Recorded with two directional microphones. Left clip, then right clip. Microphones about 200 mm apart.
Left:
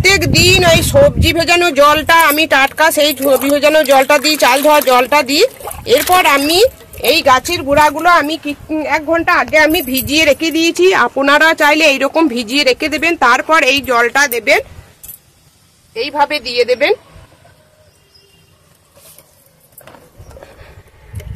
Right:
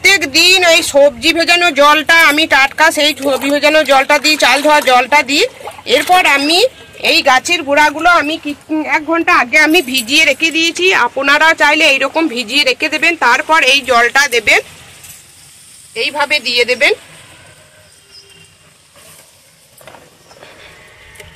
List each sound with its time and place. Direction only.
0.0 s speech: 50° left (ahead or behind)
15.9 s speech: 60° left (ahead or behind)